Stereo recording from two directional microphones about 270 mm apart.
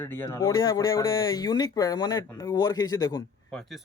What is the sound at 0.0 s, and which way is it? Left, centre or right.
Speech, centre.